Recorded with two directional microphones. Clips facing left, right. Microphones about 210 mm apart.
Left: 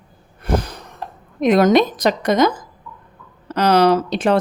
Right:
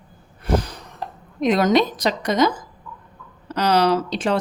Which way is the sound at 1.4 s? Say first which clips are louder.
Left 4 dB; 50° left (ahead or behind).